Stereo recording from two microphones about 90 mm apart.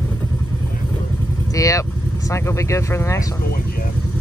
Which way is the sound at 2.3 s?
35° left (ahead or behind).